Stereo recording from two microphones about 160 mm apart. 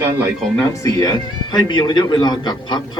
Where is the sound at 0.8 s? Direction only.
25° left (ahead or behind).